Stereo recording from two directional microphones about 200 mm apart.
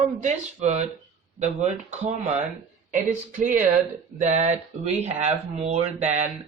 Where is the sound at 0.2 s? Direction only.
35° right (ahead or behind).